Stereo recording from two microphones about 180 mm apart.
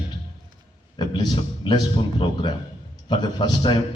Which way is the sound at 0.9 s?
25° left (ahead or behind).